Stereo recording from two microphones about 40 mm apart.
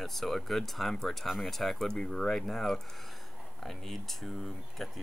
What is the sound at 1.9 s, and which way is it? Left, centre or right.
Speech, centre.